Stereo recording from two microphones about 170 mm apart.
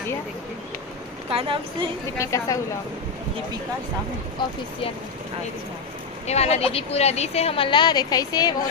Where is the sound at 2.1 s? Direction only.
20° left (ahead or behind).